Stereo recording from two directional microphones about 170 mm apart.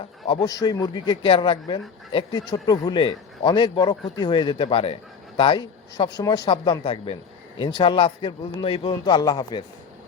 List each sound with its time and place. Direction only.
0.4 s a man's voice: 20° left (ahead or behind)